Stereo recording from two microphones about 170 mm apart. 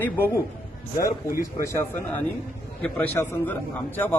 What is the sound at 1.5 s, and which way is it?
A man's voice, 15° left (ahead or behind).